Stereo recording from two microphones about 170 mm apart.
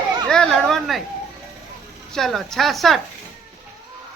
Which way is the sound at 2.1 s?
Centre (ahead or behind).